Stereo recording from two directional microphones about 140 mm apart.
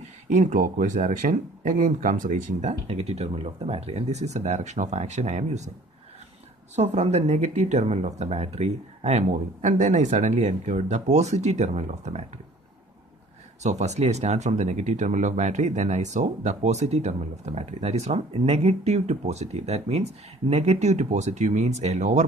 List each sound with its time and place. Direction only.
0.0 s speech: 60° right (ahead or behind)
2.9 s speech: 45° right (ahead or behind)
6.7 s speech: 55° right (ahead or behind)
13.6 s speech: 55° right (ahead or behind)